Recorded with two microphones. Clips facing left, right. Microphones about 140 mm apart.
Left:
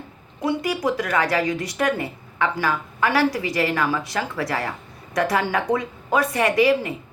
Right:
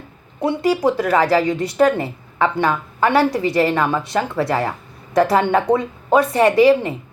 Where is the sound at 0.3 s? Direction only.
30° right (ahead or behind).